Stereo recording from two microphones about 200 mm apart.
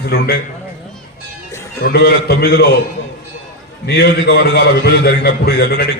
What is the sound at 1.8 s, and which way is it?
Speech, 50° left (ahead or behind).